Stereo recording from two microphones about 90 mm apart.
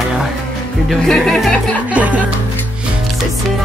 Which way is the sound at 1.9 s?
15° right (ahead or behind).